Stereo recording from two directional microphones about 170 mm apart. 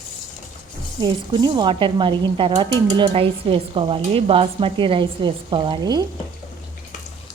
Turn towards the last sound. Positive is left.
turn(degrees=-25)  # may be behind; listen again after turning